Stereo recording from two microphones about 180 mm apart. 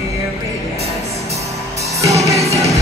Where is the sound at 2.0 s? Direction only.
15° right (ahead or behind).